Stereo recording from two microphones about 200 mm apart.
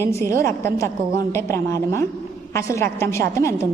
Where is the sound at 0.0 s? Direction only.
15° left (ahead or behind).